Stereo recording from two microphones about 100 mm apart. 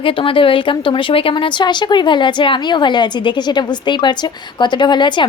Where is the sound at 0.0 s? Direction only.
60° left (ahead or behind).